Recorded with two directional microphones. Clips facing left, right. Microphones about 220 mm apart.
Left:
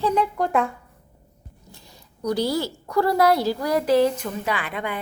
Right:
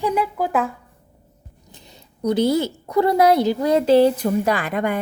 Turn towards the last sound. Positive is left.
turn(degrees=-45)  # may be behind; listen again after turning